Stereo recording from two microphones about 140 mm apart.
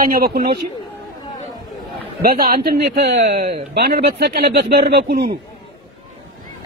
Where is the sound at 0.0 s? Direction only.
90° right.